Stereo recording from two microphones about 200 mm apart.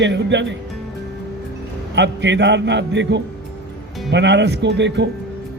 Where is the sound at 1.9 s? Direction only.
60° right (ahead or behind).